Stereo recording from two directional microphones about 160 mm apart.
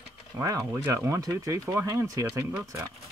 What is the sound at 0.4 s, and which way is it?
Speech, 20° right (ahead or behind).